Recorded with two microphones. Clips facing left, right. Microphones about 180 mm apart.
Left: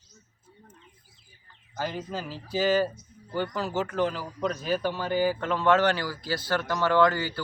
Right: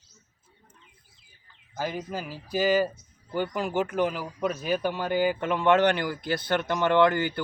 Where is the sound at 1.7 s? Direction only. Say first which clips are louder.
Right 1 dB; 5° right (ahead or behind).